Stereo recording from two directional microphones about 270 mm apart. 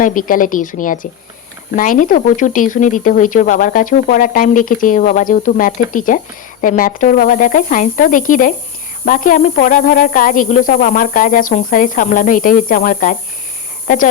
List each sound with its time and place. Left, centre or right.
0.0 s speech: left